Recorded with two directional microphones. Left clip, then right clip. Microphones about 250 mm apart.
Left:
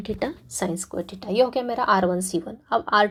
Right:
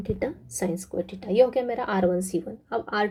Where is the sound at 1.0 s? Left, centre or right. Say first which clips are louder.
Right 1 dB; left.